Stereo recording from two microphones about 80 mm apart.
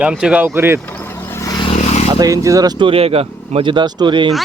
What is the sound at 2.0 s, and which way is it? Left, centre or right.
Speech, right.